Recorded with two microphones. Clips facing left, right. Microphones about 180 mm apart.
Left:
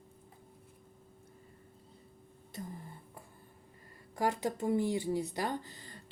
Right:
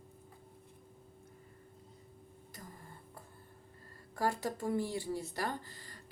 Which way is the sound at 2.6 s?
25° left (ahead or behind).